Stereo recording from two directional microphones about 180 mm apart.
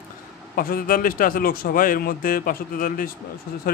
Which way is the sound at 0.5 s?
50° left (ahead or behind).